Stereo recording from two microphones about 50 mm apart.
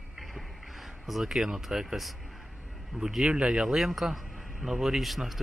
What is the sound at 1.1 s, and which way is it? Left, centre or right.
Speech, centre.